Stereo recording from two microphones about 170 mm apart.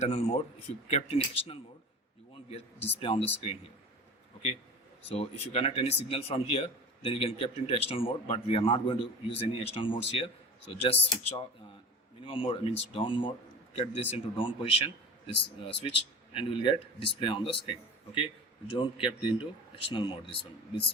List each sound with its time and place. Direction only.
0.0 s a man's voice: 35° left (ahead or behind)
3.0 s a man's voice: 35° left (ahead or behind)
5.0 s a man's voice: 35° left (ahead or behind)